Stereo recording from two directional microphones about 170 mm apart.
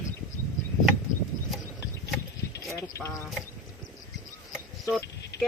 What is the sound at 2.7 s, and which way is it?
Speech, 20° left (ahead or behind).